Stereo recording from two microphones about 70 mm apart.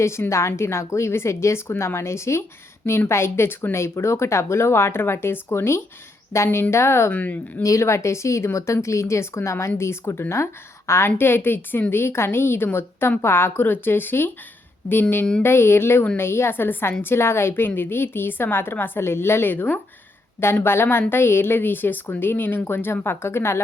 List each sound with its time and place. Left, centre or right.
0.0 s speech: left
7.1 s speech: left
7.6 s speech: left
15.4 s speech: left